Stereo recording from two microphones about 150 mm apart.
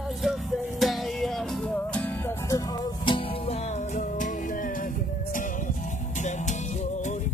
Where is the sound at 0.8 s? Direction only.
Centre (ahead or behind).